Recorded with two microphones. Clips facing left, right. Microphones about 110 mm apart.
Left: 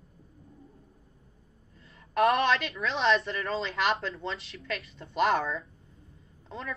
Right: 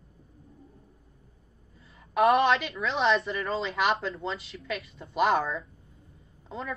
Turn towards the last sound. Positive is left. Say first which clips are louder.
# right 2 dB
turn(degrees=-5)  # may be behind; listen again after turning